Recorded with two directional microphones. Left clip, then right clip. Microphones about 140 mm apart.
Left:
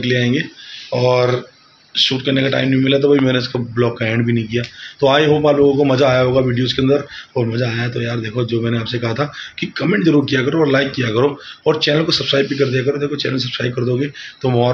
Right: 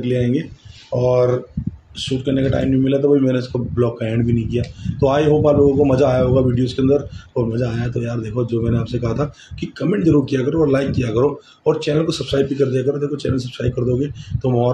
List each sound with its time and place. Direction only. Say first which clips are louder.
0.0 s a man's voice: left 3 dB; 15° right (ahead or behind)